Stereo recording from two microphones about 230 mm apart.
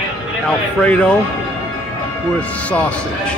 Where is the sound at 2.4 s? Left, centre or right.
Centre.